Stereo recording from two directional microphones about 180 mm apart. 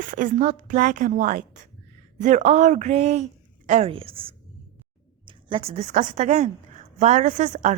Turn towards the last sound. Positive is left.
turn(degrees=-45)  # may be behind; listen again after turning